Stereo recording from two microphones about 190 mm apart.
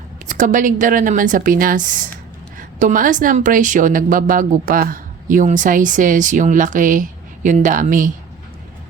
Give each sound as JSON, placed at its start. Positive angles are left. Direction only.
{"t": 0.3, "sound": "a woman's voice", "side_deg": -45}